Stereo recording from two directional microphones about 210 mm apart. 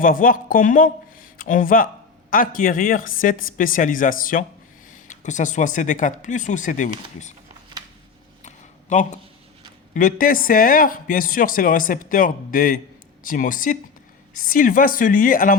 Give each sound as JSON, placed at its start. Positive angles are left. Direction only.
{"t": 0.0, "sound": "speech", "side_deg": 40}
{"t": 8.4, "sound": "a sound", "side_deg": 35}
{"t": 9.9, "sound": "speech", "side_deg": 40}